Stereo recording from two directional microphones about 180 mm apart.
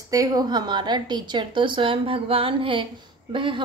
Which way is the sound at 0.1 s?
20° right (ahead or behind).